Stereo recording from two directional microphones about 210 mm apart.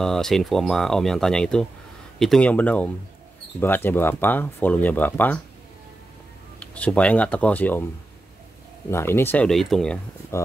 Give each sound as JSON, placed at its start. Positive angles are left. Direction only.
{"t": 0.0, "sound": "speech", "side_deg": 0}
{"t": 6.6, "sound": "speech", "side_deg": 5}
{"t": 8.9, "sound": "speech", "side_deg": 10}